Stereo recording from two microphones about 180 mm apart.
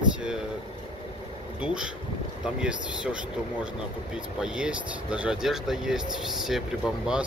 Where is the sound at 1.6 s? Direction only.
5° right (ahead or behind).